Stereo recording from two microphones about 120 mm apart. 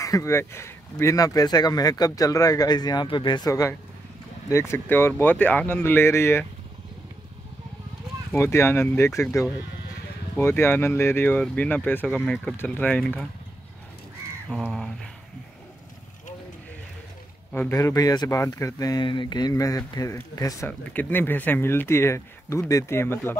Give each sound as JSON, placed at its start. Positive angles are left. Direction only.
{"t": 0.0, "sound": "speech", "side_deg": 25}
{"t": 8.3, "sound": "speech", "side_deg": 20}
{"t": 14.5, "sound": "speech", "side_deg": 10}
{"t": 17.7, "sound": "speech", "side_deg": 30}
{"t": 20.6, "sound": "speech", "side_deg": 15}